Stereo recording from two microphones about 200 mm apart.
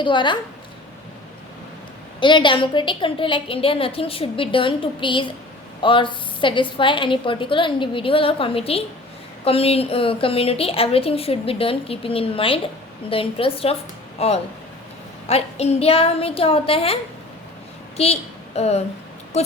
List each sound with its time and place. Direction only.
0.0 s a woman's voice: 25° left (ahead or behind)
2.2 s a woman's voice: 25° left (ahead or behind)